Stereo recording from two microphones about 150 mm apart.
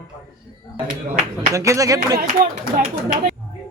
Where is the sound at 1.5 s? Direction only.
20° right (ahead or behind).